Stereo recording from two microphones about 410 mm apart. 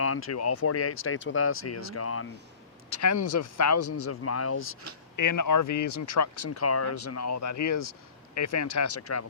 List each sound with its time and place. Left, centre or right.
0.0 s speech: left
5.1 s speech: left